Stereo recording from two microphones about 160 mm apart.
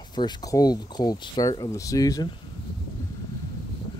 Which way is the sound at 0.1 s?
25° left (ahead or behind).